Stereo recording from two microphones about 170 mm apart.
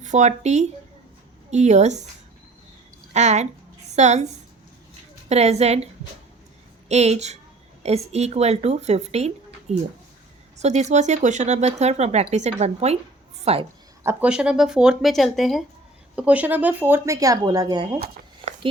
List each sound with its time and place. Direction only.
0.0 s speech: 45° right (ahead or behind)
3.1 s speech: 40° right (ahead or behind)
5.3 s speech: 40° right (ahead or behind)
14.0 s speech: 10° right (ahead or behind)